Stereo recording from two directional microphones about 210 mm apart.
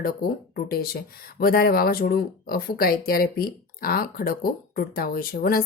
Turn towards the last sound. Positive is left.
turn(degrees=45)  # may be behind; listen again after turning